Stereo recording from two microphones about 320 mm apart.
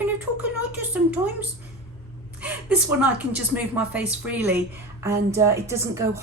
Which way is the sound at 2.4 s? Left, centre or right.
Centre.